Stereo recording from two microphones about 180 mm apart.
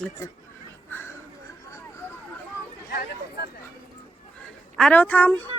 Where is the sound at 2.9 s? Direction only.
60° left (ahead or behind).